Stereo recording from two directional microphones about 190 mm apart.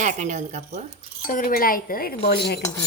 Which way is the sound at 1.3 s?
45° left (ahead or behind).